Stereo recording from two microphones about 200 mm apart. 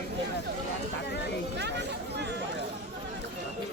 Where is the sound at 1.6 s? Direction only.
60° right (ahead or behind).